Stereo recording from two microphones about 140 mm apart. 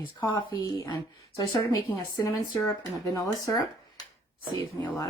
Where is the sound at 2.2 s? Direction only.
20° left (ahead or behind).